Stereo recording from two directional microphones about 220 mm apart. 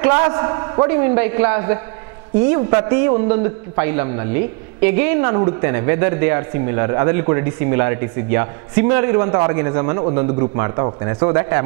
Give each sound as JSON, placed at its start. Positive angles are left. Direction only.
{"t": 0.2, "sound": "a man's voice", "side_deg": -15}